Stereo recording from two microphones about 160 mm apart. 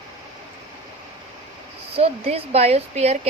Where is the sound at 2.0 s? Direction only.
40° right (ahead or behind).